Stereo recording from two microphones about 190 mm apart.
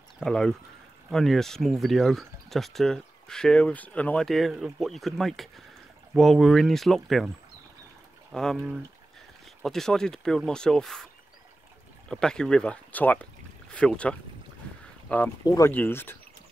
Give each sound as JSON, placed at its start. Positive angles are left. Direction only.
{"t": 0.2, "sound": "speech", "side_deg": 5}
{"t": 8.3, "sound": "speech", "side_deg": 0}
{"t": 12.1, "sound": "speech", "side_deg": 5}
{"t": 15.4, "sound": "speech", "side_deg": 20}